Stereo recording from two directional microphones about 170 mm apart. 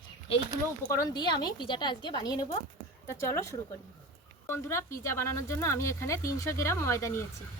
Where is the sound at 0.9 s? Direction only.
20° left (ahead or behind).